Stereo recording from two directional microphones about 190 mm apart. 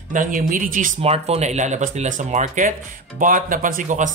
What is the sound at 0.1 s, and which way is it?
Speech, 45° right (ahead or behind).